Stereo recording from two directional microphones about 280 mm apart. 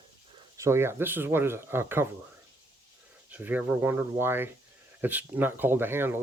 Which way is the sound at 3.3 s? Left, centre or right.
Centre.